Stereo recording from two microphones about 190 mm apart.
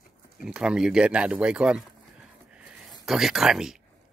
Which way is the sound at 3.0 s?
Centre (ahead or behind).